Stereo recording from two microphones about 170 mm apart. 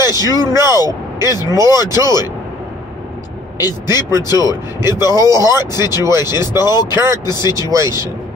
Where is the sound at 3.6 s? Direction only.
25° left (ahead or behind).